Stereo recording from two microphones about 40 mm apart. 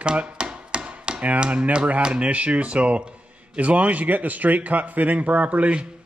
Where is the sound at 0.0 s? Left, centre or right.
Right.